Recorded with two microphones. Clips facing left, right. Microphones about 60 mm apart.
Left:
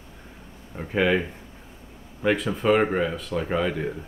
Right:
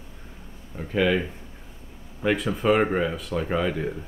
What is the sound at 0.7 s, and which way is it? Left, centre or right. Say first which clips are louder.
Speech: even; centre.